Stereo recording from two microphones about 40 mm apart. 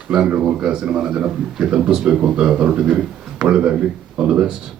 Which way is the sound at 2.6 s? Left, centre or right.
Right.